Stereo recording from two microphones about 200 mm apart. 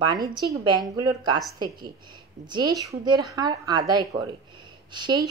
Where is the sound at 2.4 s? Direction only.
20° right (ahead or behind).